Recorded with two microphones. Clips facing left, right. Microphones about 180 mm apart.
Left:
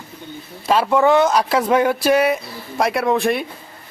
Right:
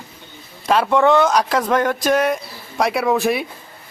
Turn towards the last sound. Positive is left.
turn(degrees=0)  # may be behind; listen again after turning